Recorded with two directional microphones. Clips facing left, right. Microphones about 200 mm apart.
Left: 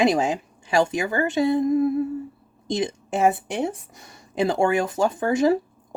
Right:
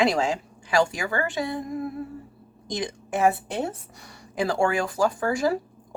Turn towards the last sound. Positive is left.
turn(degrees=20)  # may be behind; listen again after turning